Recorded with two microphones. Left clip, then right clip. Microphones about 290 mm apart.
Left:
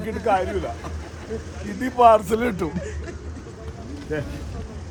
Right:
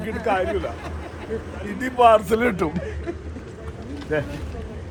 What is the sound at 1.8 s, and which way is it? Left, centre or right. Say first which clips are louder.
Speech: even; left.